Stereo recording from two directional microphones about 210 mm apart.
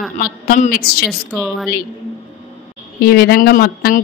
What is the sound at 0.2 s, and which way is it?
Speech, 40° left (ahead or behind).